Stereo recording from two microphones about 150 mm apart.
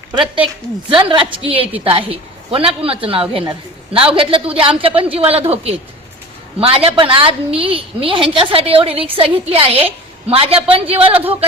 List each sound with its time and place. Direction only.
0.4 s a woman's voice: 35° right (ahead or behind)